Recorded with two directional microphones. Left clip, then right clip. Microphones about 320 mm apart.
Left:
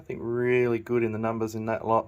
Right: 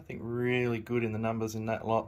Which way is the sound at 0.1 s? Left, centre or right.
Left.